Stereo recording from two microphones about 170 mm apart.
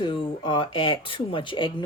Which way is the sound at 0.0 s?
30° left (ahead or behind).